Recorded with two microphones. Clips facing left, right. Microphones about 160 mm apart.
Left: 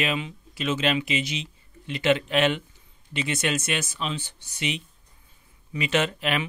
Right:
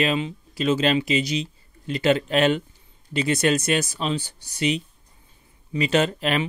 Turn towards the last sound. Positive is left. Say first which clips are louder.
# right 4 dB
turn(degrees=-35)  # may be behind; listen again after turning